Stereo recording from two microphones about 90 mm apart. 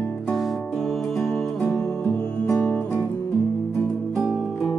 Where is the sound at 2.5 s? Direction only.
20° left (ahead or behind).